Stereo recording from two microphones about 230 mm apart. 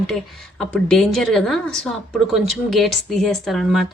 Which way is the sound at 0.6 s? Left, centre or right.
Centre.